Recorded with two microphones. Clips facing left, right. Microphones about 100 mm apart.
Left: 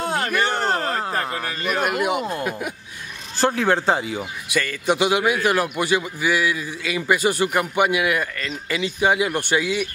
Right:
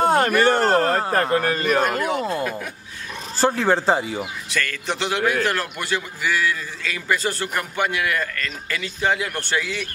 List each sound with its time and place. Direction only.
0.0 s a sound: 50° right (ahead or behind)
1.3 s a man's voice: 50° right (ahead or behind)
1.8 s a man's voice: 10° left (ahead or behind)
3.3 s speech: centre (ahead or behind)
4.5 s a man's voice: 10° left (ahead or behind)